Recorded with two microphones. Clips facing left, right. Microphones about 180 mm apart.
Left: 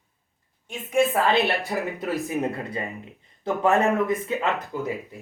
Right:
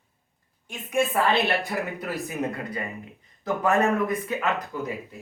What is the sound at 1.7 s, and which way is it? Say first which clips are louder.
Speech: left 2 dB; 25° left (ahead or behind).